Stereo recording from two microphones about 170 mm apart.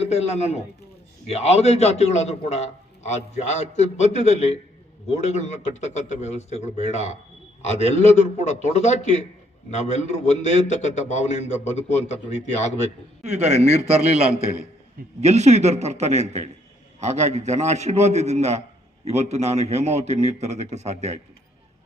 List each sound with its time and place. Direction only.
0.0 s a man's voice: 40° left (ahead or behind)
13.2 s a man's voice: 40° right (ahead or behind)
15.2 s a man's voice: 40° right (ahead or behind)